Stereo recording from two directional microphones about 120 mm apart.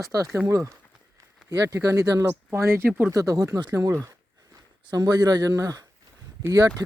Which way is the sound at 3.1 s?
30° right (ahead or behind).